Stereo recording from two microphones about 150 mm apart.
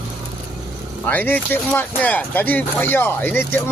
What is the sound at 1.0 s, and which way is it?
Speech, 10° left (ahead or behind).